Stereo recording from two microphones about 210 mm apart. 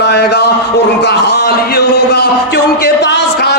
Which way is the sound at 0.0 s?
50° left (ahead or behind).